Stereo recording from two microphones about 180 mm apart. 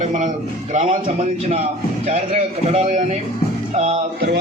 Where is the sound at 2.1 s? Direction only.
35° right (ahead or behind).